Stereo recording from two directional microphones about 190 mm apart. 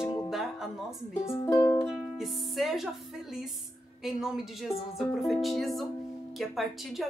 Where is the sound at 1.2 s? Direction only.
15° left (ahead or behind).